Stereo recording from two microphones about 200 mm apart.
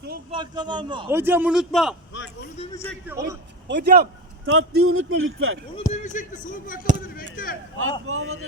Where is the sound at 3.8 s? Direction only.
50° right (ahead or behind).